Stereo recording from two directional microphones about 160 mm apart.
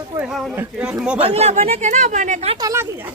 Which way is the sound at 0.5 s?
5° right (ahead or behind).